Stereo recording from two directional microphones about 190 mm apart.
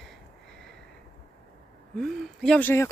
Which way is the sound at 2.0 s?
5° left (ahead or behind).